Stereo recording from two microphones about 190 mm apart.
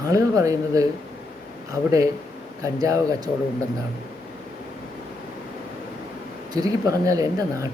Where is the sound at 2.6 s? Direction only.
15° right (ahead or behind).